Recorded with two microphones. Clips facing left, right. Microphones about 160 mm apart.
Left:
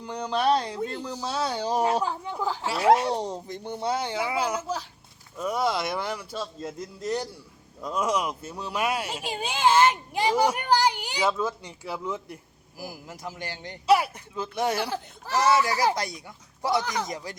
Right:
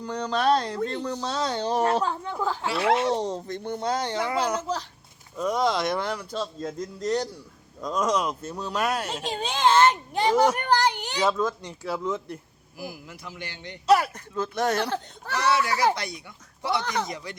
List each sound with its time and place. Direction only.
0.0 s speech: 10° left (ahead or behind)
2.6 s speech: 40° left (ahead or behind)
3.1 s speech: 10° left (ahead or behind)
12.8 s speech: 40° left (ahead or behind)
13.8 s speech: 10° left (ahead or behind)
15.4 s speech: 40° left (ahead or behind)